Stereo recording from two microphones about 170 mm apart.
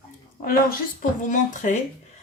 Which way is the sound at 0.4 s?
55° left (ahead or behind).